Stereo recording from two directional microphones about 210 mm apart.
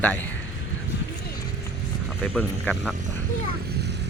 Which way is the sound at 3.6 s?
50° right (ahead or behind).